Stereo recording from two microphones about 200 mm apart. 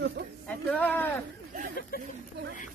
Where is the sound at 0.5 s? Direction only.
5° left (ahead or behind).